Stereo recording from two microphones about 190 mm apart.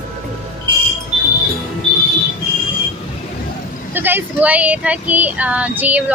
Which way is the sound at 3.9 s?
10° right (ahead or behind).